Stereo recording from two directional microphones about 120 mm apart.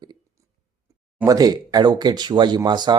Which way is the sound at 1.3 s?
30° right (ahead or behind).